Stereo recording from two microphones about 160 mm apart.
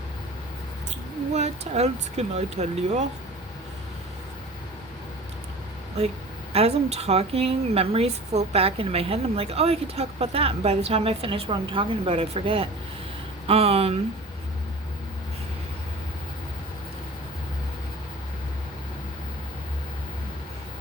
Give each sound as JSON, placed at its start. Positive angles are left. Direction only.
{"t": 1.3, "sound": "speech", "side_deg": -45}
{"t": 6.5, "sound": "speech", "side_deg": -40}